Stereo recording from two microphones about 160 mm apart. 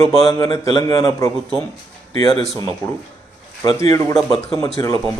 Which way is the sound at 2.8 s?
15° left (ahead or behind).